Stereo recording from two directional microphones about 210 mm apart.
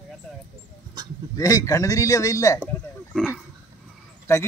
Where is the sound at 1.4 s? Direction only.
15° left (ahead or behind).